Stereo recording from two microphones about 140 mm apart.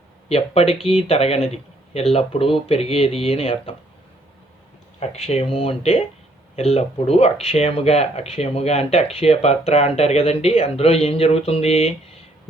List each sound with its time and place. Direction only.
0.3 s speech: 45° left (ahead or behind)
4.9 s speech: 50° left (ahead or behind)